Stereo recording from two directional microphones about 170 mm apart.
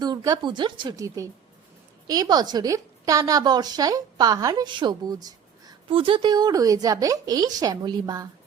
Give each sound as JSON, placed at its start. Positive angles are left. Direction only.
{"t": 0.0, "sound": "a woman's voice", "side_deg": -25}